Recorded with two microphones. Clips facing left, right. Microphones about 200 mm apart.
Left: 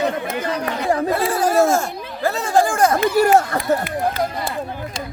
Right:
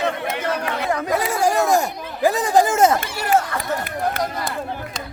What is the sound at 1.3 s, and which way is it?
Speech, 10° right (ahead or behind).